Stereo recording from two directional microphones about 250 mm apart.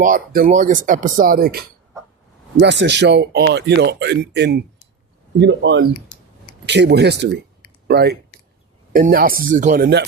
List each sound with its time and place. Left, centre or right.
0.0 s speech: right